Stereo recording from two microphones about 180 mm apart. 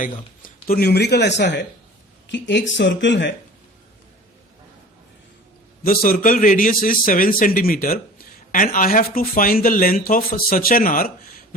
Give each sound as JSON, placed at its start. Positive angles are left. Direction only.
{"t": 0.0, "sound": "speech", "side_deg": 55}
{"t": 5.8, "sound": "a man's voice", "side_deg": 55}